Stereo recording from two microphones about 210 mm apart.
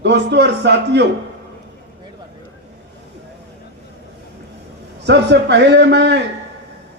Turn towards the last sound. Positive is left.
turn(degrees=-55)  # may be behind; listen again after turning